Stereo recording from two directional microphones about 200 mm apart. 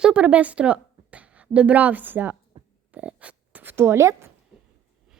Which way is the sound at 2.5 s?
30° right (ahead or behind).